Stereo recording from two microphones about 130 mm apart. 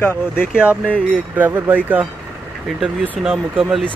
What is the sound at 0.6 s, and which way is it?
Speech, 10° right (ahead or behind).